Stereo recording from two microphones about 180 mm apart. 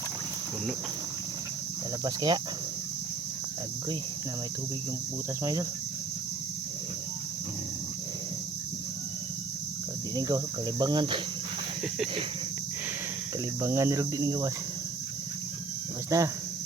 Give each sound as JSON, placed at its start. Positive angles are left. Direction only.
{"t": 2.0, "sound": "cricket", "side_deg": -25}
{"t": 5.4, "sound": "speech", "side_deg": -20}
{"t": 10.2, "sound": "cricket", "side_deg": -20}
{"t": 13.6, "sound": "speech", "side_deg": -15}
{"t": 16.0, "sound": "speech", "side_deg": -20}